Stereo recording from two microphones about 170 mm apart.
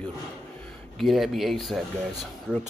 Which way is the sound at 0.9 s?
Centre (ahead or behind).